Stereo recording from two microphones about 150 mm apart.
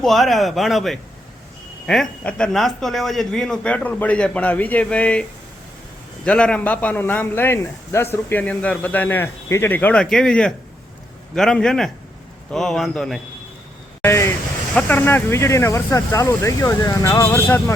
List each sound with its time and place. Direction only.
0.0 s a man's voice: centre (ahead or behind)
6.2 s a man's voice: 5° left (ahead or behind)
14.0 s a sound: 15° left (ahead or behind)
14.8 s speech: 10° left (ahead or behind)